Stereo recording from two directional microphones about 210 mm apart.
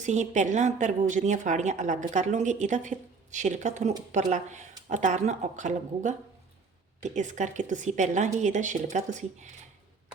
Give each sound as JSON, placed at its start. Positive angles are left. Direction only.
{"t": 0.0, "sound": "a woman's voice", "side_deg": -35}